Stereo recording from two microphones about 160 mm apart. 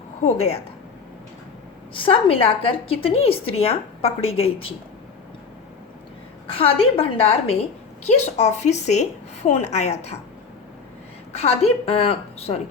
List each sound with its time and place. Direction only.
0.2 s a woman's voice: 40° left (ahead or behind)
1.9 s a woman's voice: 35° left (ahead or behind)
6.5 s a woman's voice: 35° left (ahead or behind)
11.3 s a woman's voice: 40° left (ahead or behind)